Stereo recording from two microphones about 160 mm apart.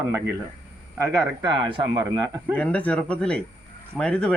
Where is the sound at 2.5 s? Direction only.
10° left (ahead or behind).